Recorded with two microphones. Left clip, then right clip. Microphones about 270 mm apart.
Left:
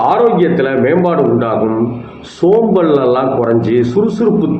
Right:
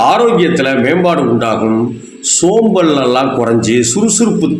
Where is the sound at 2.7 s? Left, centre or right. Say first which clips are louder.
Even; right.